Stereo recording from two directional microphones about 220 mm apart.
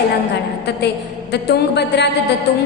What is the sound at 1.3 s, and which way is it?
Speech, 50° left (ahead or behind).